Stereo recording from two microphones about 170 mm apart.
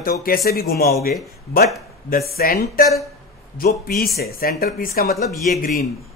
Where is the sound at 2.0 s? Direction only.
60° left (ahead or behind).